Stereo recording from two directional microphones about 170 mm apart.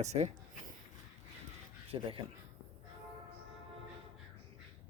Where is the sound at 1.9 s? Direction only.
30° right (ahead or behind).